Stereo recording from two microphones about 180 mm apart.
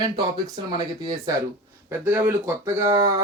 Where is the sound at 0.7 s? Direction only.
25° right (ahead or behind).